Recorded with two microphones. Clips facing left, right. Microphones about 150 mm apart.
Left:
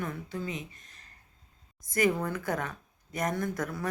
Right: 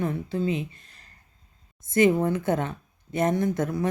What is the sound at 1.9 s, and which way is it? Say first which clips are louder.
Speech: right 7 dB; 25° right (ahead or behind).